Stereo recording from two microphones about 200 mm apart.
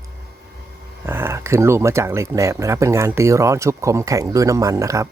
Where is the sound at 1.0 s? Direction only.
10° right (ahead or behind).